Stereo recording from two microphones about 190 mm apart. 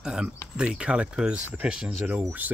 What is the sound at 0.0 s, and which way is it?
Speech, 5° right (ahead or behind).